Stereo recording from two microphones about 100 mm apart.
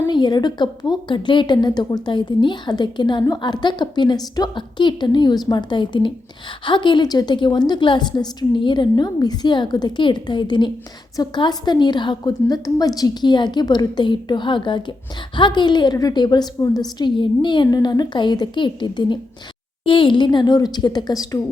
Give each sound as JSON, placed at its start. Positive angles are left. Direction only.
{"t": 0.1, "sound": "a woman's voice", "side_deg": 50}
{"t": 17.7, "sound": "a woman's voice", "side_deg": 40}